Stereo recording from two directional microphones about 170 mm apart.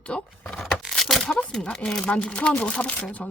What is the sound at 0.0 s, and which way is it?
Speech, 5° left (ahead or behind).